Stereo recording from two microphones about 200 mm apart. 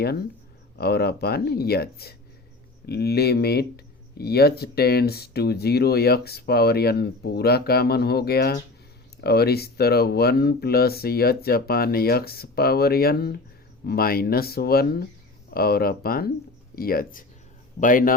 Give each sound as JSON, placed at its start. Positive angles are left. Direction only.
{"t": 0.8, "sound": "speech", "side_deg": 50}